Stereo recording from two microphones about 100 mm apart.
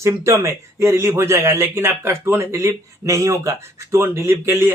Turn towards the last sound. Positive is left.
turn(degrees=-25)  # may be behind; listen again after turning